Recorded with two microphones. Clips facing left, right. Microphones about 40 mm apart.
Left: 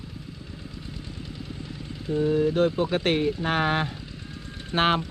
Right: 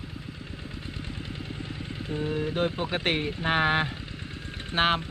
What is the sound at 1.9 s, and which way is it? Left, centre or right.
Vehicle, right.